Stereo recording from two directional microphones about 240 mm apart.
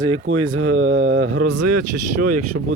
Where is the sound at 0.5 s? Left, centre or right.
Right.